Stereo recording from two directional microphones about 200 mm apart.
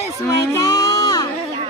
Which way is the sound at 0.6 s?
15° left (ahead or behind).